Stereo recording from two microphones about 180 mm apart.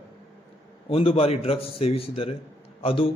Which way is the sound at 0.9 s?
30° left (ahead or behind).